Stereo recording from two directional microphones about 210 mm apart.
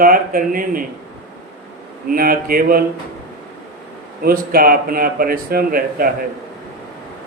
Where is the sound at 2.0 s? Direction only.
45° right (ahead or behind).